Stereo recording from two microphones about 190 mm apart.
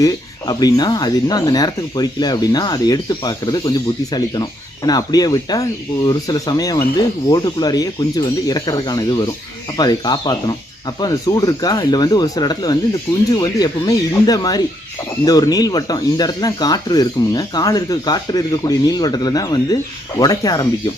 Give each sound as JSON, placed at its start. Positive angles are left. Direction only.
{"t": 0.0, "sound": "speech", "side_deg": 20}